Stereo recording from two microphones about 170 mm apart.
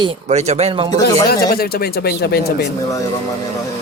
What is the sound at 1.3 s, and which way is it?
Speech, 65° left (ahead or behind).